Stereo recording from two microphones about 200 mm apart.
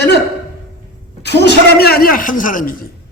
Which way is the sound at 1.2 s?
55° left (ahead or behind).